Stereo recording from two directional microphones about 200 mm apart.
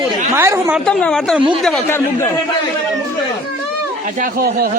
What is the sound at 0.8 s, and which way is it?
Speech, 5° left (ahead or behind).